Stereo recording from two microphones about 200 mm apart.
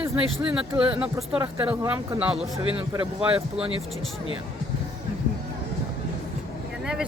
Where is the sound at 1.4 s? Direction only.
15° right (ahead or behind).